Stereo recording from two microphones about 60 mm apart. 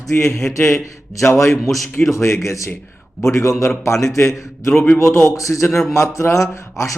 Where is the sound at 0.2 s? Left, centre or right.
Left.